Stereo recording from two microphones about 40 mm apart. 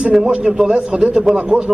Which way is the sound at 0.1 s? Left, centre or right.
Centre.